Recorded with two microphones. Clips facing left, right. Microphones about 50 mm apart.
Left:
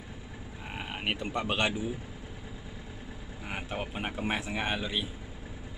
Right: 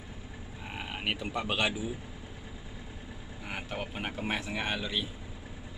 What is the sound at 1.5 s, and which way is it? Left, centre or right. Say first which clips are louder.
Speech: left 1 dB; centre.